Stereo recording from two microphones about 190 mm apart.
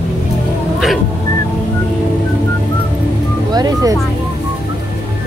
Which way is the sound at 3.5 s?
20° right (ahead or behind).